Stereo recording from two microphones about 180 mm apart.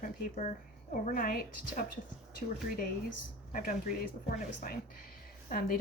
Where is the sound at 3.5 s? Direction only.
50° left (ahead or behind).